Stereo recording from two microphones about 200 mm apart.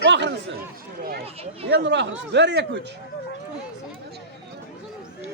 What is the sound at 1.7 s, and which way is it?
Speech, 60° right (ahead or behind).